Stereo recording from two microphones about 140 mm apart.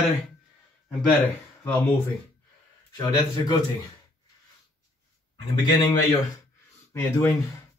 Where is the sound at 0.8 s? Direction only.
10° left (ahead or behind).